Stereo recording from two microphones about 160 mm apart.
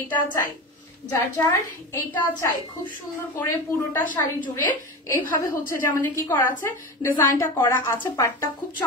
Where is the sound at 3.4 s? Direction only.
15° left (ahead or behind).